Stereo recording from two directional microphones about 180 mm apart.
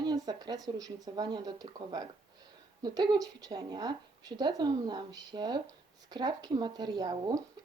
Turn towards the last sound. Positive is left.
turn(degrees=-20)  # may be behind; listen again after turning